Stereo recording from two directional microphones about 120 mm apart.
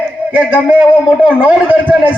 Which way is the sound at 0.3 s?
10° right (ahead or behind).